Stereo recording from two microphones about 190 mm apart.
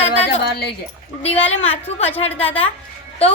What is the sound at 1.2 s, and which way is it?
A woman's voice, 30° left (ahead or behind).